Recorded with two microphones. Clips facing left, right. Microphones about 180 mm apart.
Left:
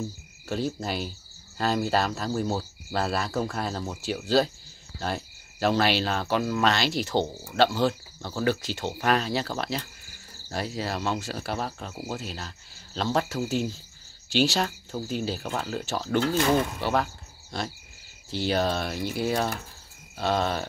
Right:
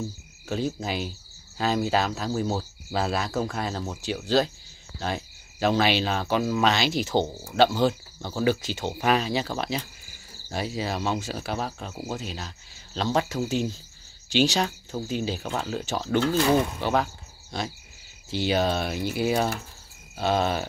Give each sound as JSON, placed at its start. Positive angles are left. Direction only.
{"t": 0.5, "sound": "speech", "side_deg": 0}